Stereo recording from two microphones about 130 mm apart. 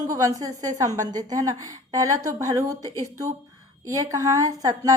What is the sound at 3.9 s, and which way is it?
A woman's voice, 25° right (ahead or behind).